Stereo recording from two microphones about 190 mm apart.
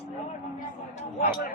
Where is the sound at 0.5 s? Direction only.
35° left (ahead or behind).